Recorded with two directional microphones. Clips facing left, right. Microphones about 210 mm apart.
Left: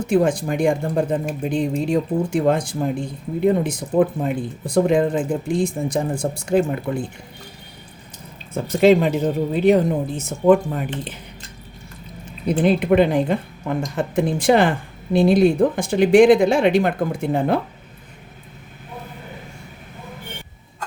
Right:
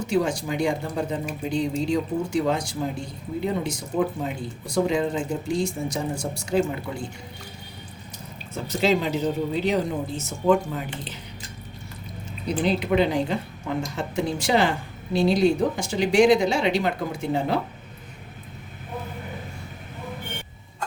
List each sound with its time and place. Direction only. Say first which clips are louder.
0.0 s a woman's voice: left 6 dB; 55° left (ahead or behind)
8.5 s speech: left 8 dB; 55° left (ahead or behind)
12.5 s a woman's voice: left 6 dB; 55° left (ahead or behind)